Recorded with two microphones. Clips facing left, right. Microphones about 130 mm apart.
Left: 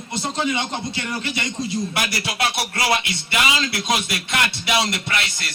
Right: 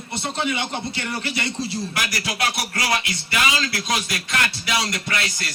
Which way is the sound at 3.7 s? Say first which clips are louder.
Left 2 dB; 20° left (ahead or behind).